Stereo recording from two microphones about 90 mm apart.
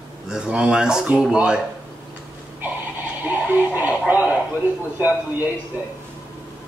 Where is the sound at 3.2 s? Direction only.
15° right (ahead or behind).